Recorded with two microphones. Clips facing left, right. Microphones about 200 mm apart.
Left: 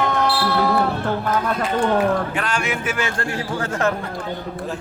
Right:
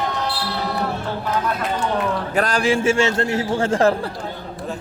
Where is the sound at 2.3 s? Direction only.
35° right (ahead or behind).